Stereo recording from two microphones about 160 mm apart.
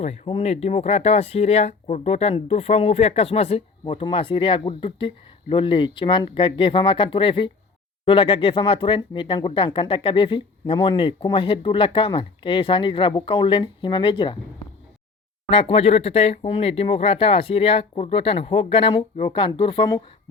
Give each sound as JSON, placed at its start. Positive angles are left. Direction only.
{"t": 0.0, "sound": "speech", "side_deg": 40}
{"t": 15.4, "sound": "speech", "side_deg": 35}